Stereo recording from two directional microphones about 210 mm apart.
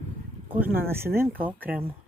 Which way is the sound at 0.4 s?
10° right (ahead or behind).